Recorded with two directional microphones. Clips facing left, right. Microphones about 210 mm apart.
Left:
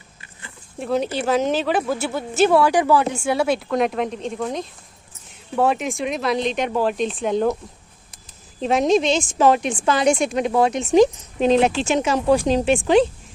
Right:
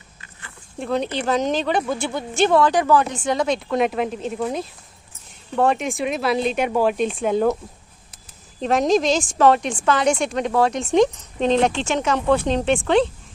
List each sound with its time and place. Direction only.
0.8 s speech: 5° left (ahead or behind)
8.6 s speech: centre (ahead or behind)
9.7 s speech: 10° left (ahead or behind)